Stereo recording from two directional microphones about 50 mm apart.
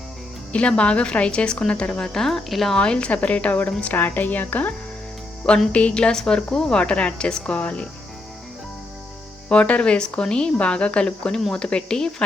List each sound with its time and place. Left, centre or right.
0.8 s speech: left; by 2.7 s centre
2.7 s speech: centre
3.9 s a woman's voice: left
5.7 s speech: left
9.5 s speech: left